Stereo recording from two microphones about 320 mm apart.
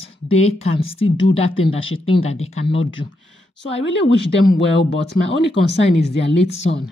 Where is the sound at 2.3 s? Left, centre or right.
Left.